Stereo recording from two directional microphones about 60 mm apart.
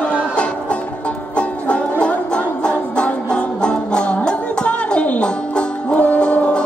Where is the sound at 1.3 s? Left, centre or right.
Centre.